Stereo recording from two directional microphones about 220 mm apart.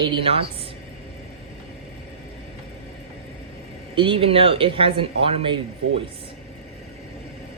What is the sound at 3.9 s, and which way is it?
Speech, 25° right (ahead or behind).